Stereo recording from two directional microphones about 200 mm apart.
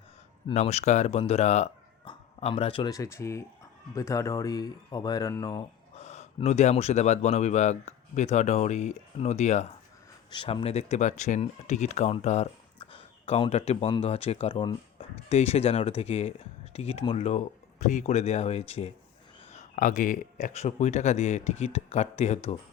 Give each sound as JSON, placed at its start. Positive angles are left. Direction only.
{"t": 0.4, "sound": "speech", "side_deg": 30}
{"t": 6.0, "sound": "speech", "side_deg": 35}